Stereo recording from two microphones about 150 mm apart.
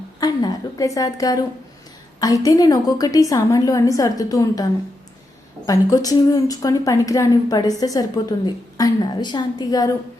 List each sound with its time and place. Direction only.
0.2 s speech: 25° left (ahead or behind)
5.6 s speech: 25° left (ahead or behind)